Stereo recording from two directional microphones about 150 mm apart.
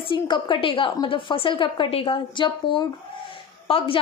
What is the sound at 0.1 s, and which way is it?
A woman's voice, 30° left (ahead or behind).